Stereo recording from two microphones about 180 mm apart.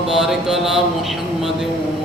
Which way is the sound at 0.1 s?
5° right (ahead or behind).